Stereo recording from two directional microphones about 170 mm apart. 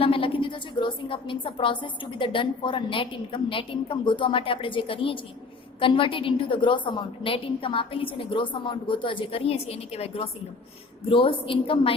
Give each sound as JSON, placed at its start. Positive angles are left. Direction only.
{"t": 0.0, "sound": "a woman's voice", "side_deg": 30}